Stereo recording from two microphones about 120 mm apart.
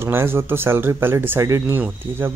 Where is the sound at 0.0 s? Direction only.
20° right (ahead or behind).